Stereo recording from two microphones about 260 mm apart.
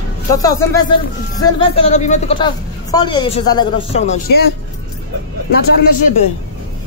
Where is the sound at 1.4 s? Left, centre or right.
Centre.